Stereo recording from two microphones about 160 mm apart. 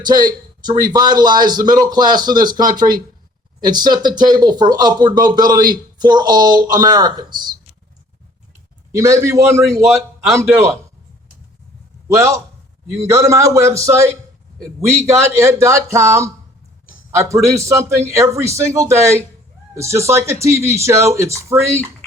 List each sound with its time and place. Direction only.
0.0 s speech: 25° right (ahead or behind)
8.9 s speech: 20° right (ahead or behind)
9.8 s speech: centre (ahead or behind)
10.5 s speech: 20° right (ahead or behind)
12.0 s speech: 20° right (ahead or behind)